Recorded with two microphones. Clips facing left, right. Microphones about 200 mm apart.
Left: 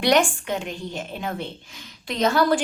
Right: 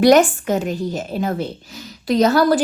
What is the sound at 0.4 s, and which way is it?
A woman's voice, 40° right (ahead or behind).